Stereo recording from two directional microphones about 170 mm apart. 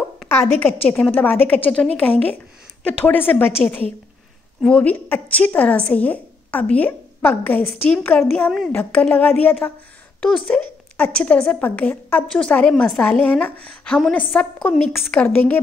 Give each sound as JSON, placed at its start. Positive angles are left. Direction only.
{"t": 0.3, "sound": "a woman's voice", "side_deg": 10}